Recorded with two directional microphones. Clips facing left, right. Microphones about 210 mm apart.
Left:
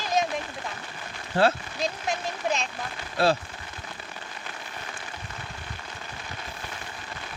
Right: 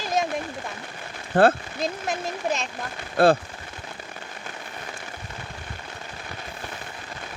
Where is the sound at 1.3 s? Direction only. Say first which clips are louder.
Right 5 dB; 50° right (ahead or behind).